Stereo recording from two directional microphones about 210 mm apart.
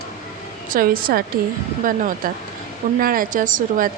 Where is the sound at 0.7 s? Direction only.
45° right (ahead or behind).